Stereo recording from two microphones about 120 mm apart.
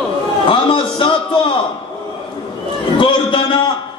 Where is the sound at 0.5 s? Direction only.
45° left (ahead or behind).